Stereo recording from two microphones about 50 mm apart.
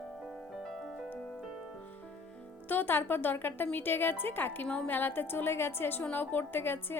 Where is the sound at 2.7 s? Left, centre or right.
Left.